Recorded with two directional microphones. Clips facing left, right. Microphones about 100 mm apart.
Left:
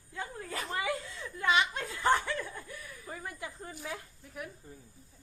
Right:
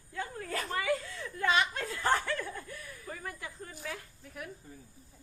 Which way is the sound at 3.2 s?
20° left (ahead or behind).